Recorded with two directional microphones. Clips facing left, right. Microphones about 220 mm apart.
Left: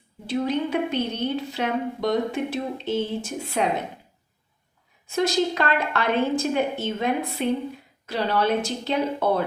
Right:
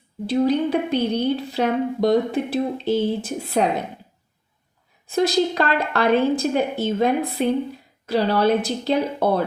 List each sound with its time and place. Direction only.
0.3 s a woman's voice: 35° right (ahead or behind)
5.0 s a woman's voice: 35° right (ahead or behind)